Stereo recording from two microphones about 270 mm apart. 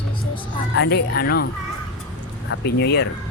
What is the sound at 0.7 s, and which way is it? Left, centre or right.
Speech, left.